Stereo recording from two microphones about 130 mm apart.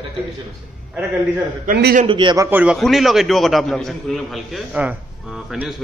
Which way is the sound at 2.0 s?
35° right (ahead or behind).